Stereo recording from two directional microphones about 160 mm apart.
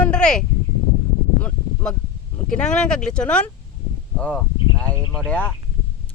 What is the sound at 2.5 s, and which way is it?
Speech, 5° left (ahead or behind).